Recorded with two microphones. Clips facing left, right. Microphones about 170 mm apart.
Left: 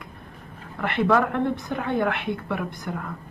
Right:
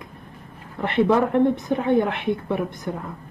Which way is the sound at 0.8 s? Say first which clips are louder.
Right 3 dB; 20° right (ahead or behind).